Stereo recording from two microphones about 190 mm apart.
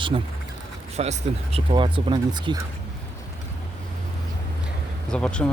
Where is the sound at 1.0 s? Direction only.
35° right (ahead or behind).